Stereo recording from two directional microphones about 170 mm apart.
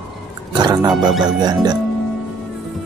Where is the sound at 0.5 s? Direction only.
25° right (ahead or behind).